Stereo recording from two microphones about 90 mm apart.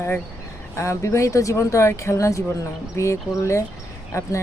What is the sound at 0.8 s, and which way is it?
Speech, 30° left (ahead or behind).